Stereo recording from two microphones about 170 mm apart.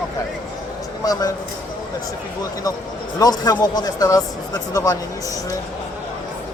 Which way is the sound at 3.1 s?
20° left (ahead or behind).